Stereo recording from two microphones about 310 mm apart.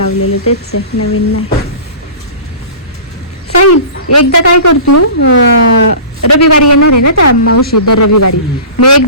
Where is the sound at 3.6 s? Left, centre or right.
Left.